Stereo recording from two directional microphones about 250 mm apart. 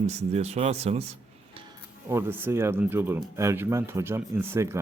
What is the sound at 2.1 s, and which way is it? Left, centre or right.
Speech, centre.